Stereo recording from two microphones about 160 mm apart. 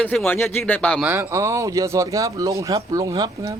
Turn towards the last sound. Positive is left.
turn(degrees=-20)  # may be behind; listen again after turning